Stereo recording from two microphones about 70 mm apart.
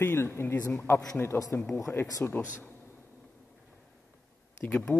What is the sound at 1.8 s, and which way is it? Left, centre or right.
Speech, left.